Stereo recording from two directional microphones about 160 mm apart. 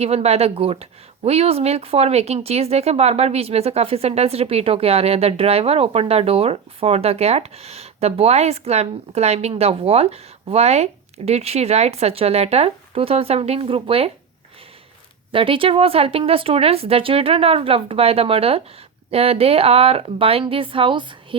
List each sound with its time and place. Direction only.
0.0 s speech: 40° right (ahead or behind)
15.3 s speech: 35° right (ahead or behind)